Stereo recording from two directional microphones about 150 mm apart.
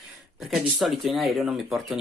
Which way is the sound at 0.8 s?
Centre (ahead or behind).